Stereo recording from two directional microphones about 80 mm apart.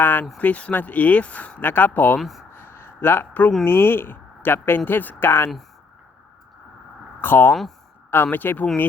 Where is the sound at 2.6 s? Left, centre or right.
Left.